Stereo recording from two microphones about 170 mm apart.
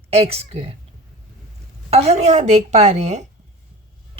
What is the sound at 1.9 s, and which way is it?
A woman's voice, 40° right (ahead or behind).